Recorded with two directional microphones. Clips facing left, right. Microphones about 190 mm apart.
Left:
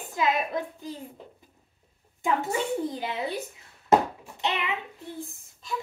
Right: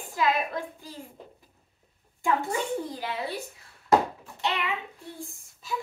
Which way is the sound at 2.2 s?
20° left (ahead or behind).